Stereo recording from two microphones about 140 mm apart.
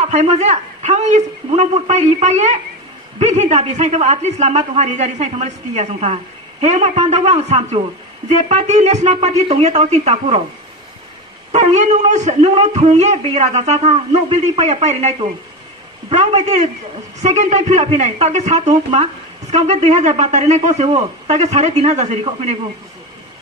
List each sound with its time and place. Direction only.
0.0 s speech: 55° right (ahead or behind)
11.5 s a man's voice: 55° right (ahead or behind)